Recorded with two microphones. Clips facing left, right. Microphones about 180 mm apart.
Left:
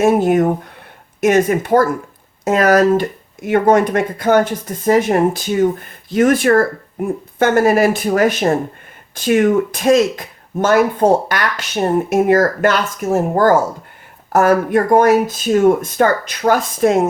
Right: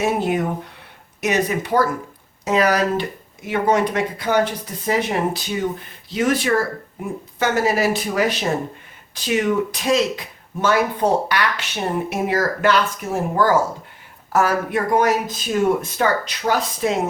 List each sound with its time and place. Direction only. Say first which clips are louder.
0.0 s speech: left 8 dB; 45° left (ahead or behind)